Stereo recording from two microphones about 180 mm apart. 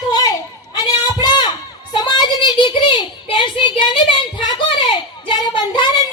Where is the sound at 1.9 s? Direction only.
25° left (ahead or behind).